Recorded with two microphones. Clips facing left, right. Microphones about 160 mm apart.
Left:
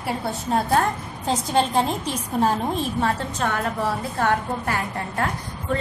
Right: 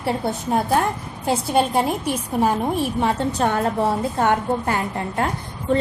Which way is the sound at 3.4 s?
30° right (ahead or behind).